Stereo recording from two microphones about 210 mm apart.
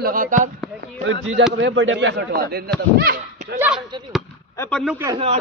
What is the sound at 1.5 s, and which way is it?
Speech, 65° right (ahead or behind).